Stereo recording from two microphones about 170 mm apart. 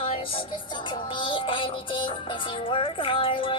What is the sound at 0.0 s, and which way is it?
Music, 35° left (ahead or behind).